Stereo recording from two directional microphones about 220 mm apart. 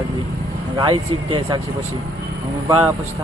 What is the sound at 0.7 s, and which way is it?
Speech, 20° right (ahead or behind).